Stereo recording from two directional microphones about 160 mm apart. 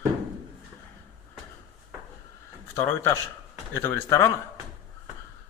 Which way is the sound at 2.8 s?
15° left (ahead or behind).